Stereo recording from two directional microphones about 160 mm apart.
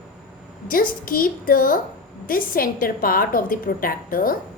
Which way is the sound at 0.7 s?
60° left (ahead or behind).